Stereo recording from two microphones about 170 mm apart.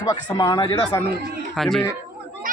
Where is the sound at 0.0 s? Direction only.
20° left (ahead or behind).